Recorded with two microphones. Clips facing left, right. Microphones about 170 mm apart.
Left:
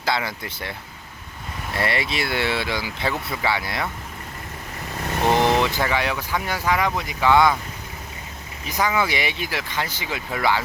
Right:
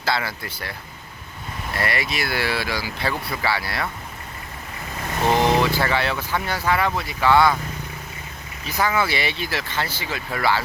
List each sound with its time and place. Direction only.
0.0 s speech: 15° left (ahead or behind)
5.3 s vehicle: 10° right (ahead or behind)
5.6 s speech: 15° left (ahead or behind)
8.6 s speech: 15° left (ahead or behind)